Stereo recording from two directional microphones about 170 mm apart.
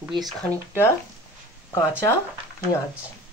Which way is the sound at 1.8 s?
15° left (ahead or behind).